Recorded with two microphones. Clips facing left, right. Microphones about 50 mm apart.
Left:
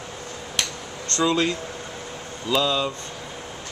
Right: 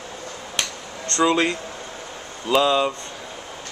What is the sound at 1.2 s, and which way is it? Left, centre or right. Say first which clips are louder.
Speech: right 3 dB; right.